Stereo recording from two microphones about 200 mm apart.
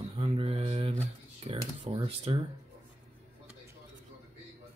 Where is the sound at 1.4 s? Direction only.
30° right (ahead or behind).